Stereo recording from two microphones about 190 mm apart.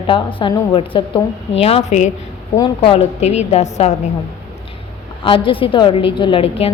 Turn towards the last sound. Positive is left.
turn(degrees=30)  # may be behind; listen again after turning